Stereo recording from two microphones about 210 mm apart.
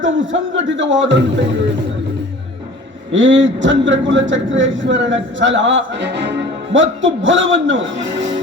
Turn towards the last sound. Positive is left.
turn(degrees=-60)  # may be behind; listen again after turning